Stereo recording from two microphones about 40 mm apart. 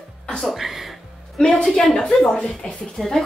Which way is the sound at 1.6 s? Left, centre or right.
Centre.